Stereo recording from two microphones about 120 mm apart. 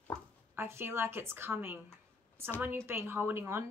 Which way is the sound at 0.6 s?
20° right (ahead or behind).